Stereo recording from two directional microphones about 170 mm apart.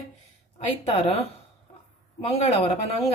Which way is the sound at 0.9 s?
35° left (ahead or behind).